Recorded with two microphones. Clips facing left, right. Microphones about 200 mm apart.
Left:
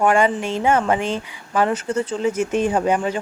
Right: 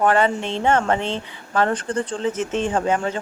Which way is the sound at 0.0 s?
10° left (ahead or behind).